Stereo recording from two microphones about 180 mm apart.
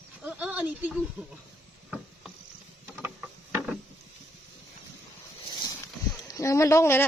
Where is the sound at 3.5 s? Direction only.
5° right (ahead or behind).